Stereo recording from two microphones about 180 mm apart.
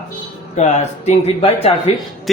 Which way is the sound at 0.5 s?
40° left (ahead or behind).